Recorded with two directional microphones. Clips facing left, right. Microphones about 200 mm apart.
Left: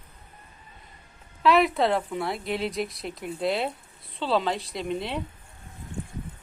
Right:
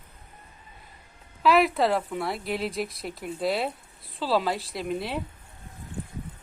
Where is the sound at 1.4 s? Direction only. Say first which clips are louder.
Even; centre (ahead or behind).